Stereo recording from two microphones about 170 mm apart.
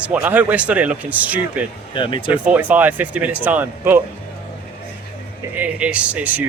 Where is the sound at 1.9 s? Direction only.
30° left (ahead or behind).